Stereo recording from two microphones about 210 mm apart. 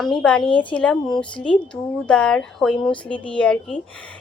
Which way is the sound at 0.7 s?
5° left (ahead or behind).